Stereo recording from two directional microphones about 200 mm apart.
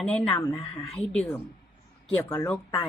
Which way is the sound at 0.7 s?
5° left (ahead or behind).